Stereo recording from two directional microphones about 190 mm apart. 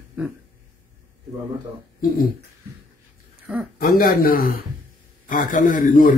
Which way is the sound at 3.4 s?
5° right (ahead or behind).